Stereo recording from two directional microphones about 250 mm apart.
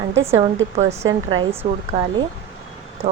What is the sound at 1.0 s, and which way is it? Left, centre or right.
Speech, right.